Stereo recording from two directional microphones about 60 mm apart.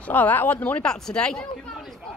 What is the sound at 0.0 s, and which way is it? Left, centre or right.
Speech, left.